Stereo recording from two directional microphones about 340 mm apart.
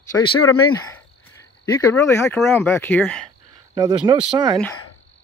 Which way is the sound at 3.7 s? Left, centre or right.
Centre.